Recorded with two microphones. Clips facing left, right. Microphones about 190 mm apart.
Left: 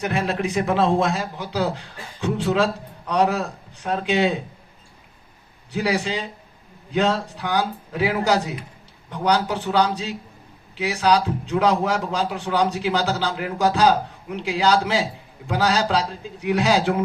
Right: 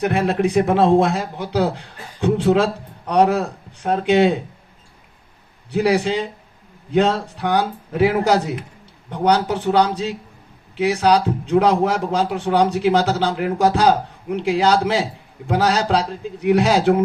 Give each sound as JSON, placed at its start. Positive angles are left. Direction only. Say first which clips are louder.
{"t": 0.0, "sound": "a man's voice", "louder": "right 5 dB", "side_deg": -60}
{"t": 5.7, "sound": "a man's voice", "louder": "right 6 dB", "side_deg": -55}